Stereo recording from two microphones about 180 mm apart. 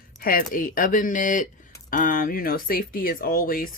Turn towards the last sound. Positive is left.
turn(degrees=50)  # may be behind; listen again after turning